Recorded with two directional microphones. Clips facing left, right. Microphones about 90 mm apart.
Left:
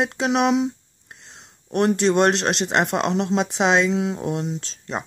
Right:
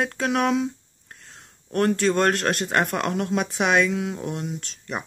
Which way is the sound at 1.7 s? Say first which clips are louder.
Left 2 dB; 20° left (ahead or behind).